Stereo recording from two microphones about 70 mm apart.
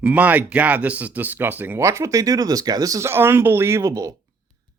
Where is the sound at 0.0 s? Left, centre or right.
Right.